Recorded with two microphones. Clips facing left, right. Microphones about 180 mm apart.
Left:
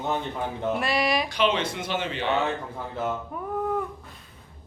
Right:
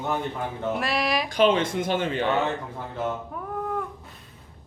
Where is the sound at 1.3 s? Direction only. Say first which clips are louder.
Right 4 dB; 50° right (ahead or behind).